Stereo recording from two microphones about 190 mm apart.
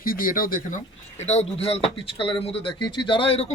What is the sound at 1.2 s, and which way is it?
Speech, 35° left (ahead or behind).